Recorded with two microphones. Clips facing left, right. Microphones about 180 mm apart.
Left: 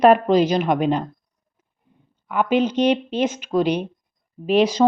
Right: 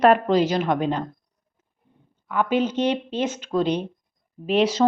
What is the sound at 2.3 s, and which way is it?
A woman's voice, 20° left (ahead or behind).